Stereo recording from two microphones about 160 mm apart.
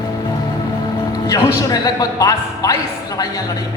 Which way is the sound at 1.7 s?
25° left (ahead or behind).